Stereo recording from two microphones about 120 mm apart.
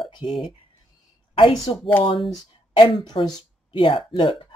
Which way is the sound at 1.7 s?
45° left (ahead or behind).